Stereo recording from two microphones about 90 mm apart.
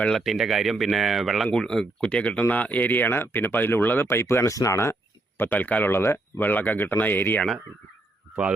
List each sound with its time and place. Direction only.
0.2 s speech: centre (ahead or behind); by 4.9 s 35° left (ahead or behind)
5.4 s speech: 20° left (ahead or behind)